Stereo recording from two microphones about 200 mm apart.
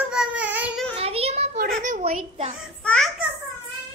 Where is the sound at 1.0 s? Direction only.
30° right (ahead or behind).